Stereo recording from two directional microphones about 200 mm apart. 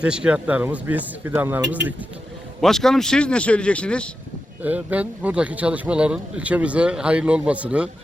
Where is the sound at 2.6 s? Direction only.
Centre (ahead or behind).